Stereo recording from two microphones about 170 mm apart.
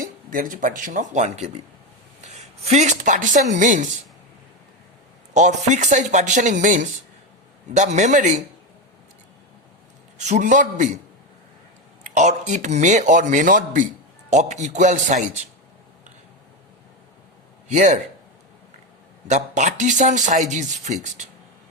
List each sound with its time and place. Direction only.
0.0 s speech: 55° right (ahead or behind)
5.3 s speech: 45° right (ahead or behind)
10.2 s speech: 45° right (ahead or behind)
12.1 s speech: 45° right (ahead or behind)
17.7 s speech: 45° right (ahead or behind)
19.3 s speech: 45° right (ahead or behind)